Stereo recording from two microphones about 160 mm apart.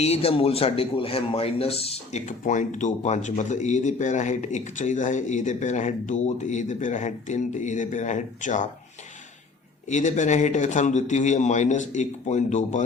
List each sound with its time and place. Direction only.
0.0 s a man's voice: 40° left (ahead or behind)
9.9 s a man's voice: 50° left (ahead or behind)